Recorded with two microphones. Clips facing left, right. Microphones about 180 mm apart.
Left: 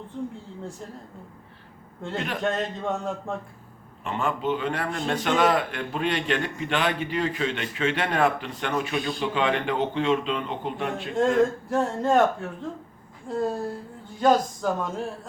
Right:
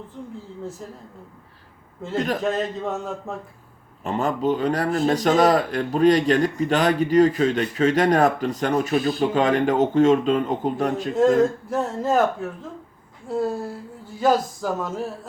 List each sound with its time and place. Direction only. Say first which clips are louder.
2.1 s speech: right 7 dB; 40° right (ahead or behind)
2.4 s speech: right 3 dB; centre (ahead or behind)
4.0 s speech: right 5 dB; 40° right (ahead or behind)
11.7 s a woman's voice: even; centre (ahead or behind)